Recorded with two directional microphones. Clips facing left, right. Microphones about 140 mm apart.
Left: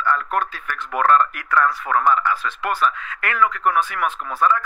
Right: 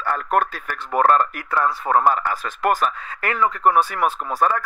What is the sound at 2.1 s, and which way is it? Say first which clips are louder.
Speech: left 3 dB; 40° right (ahead or behind).